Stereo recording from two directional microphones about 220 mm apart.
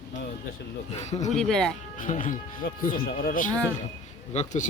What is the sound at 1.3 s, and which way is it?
Speech, centre (ahead or behind).